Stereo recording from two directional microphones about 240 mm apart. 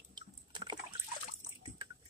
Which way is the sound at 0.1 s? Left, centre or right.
Centre.